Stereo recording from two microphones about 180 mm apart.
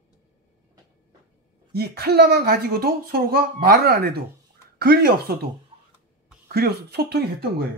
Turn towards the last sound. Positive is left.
turn(degrees=-65)  # may be behind; listen again after turning